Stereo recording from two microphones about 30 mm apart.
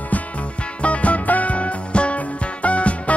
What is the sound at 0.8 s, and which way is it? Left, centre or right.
Music, left.